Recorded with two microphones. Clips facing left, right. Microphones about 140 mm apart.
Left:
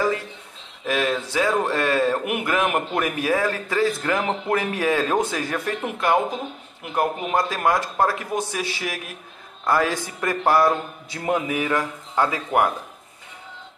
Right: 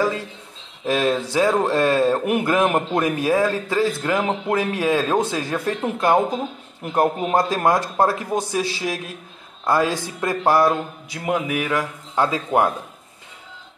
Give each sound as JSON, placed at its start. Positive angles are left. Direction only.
{"t": 0.8, "sound": "speech", "side_deg": -30}
{"t": 6.8, "sound": "a man's voice", "side_deg": -35}
{"t": 12.2, "sound": "speech", "side_deg": -20}